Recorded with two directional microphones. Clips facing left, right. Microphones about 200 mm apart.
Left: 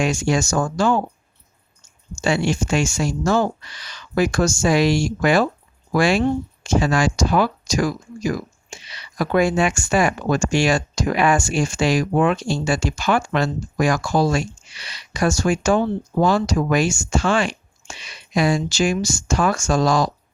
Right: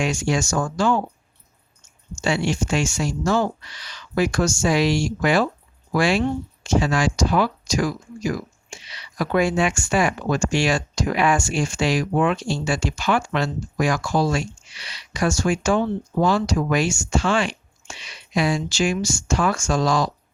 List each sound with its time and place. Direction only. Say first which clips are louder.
0.0 s speech: left 3 dB; 40° left (ahead or behind)
2.2 s speech: left 2 dB; 45° left (ahead or behind)